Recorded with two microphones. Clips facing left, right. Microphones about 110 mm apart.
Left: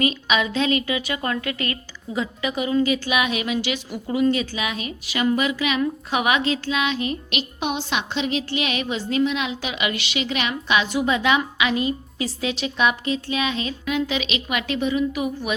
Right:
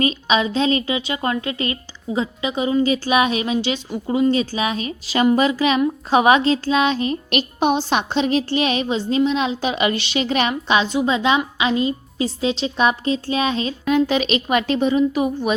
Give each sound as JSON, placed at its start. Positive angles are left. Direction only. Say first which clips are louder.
{"t": 0.0, "sound": "a woman's voice", "louder": "right 3 dB", "side_deg": -30}
{"t": 10.7, "sound": "a woman's voice", "louder": "right 1 dB", "side_deg": -25}